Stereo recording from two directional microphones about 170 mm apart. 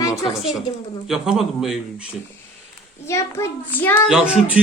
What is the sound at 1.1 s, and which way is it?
A man's voice, centre (ahead or behind).